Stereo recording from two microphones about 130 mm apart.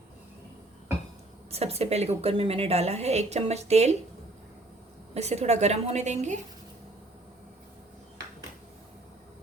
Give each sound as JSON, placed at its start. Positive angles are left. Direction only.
{"t": 1.5, "sound": "a woman's voice", "side_deg": -50}
{"t": 5.1, "sound": "a woman's voice", "side_deg": -60}